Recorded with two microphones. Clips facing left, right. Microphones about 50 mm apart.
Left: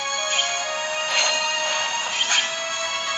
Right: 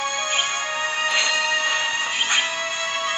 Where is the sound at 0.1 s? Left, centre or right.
Right.